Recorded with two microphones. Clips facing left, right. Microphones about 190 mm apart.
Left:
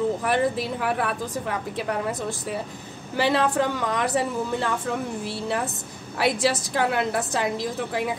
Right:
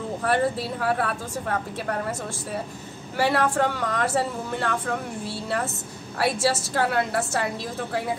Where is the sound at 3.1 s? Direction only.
20° left (ahead or behind).